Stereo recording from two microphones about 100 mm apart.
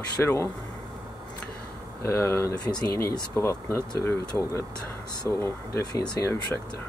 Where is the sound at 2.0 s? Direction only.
25° left (ahead or behind).